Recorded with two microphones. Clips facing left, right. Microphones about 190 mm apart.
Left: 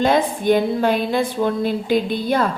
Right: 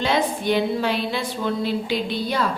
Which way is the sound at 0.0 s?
50° left (ahead or behind).